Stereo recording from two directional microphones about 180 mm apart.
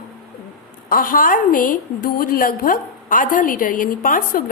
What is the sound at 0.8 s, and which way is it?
A woman's voice, 50° left (ahead or behind).